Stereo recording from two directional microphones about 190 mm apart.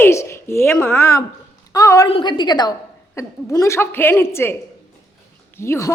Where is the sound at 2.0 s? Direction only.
25° left (ahead or behind).